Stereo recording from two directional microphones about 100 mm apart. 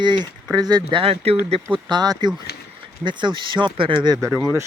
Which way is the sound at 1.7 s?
45° right (ahead or behind).